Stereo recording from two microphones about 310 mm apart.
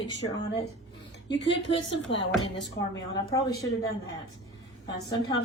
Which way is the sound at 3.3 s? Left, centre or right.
Centre.